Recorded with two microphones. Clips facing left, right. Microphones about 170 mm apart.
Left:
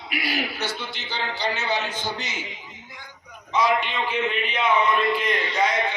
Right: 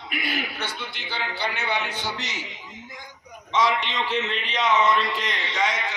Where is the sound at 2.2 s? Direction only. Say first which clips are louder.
Left 1 dB; 75° right (ahead or behind).